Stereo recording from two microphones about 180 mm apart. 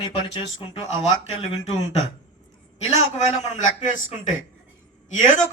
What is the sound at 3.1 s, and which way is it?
Speech, 45° left (ahead or behind).